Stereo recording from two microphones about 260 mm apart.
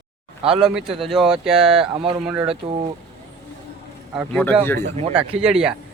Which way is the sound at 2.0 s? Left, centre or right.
Right.